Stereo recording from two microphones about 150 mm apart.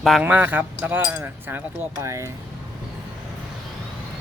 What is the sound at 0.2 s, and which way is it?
Speech, 10° right (ahead or behind).